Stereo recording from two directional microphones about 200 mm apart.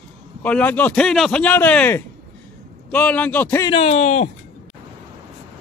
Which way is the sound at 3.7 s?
30° left (ahead or behind).